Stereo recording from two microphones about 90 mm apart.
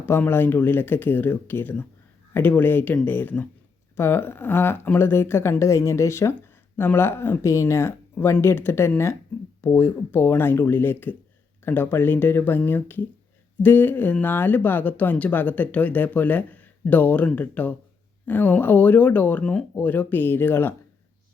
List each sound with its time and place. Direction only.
0.0 s speech: 25° left (ahead or behind)